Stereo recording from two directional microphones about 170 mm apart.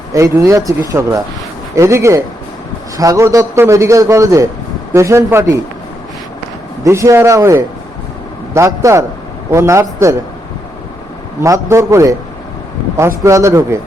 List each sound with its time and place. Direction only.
0.1 s a man's voice: 20° right (ahead or behind)
6.8 s a man's voice: 20° right (ahead or behind)
11.3 s a man's voice: 15° right (ahead or behind)